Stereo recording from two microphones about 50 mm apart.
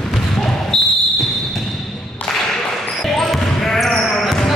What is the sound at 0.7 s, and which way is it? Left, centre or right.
Basketball bounce, centre.